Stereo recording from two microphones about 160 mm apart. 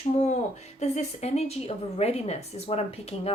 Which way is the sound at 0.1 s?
40° left (ahead or behind).